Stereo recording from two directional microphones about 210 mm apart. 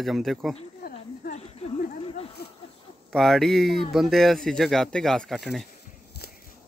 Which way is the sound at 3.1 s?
Centre (ahead or behind).